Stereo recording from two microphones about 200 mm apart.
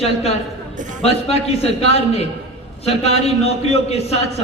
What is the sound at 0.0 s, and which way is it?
A man's voice, 30° left (ahead or behind).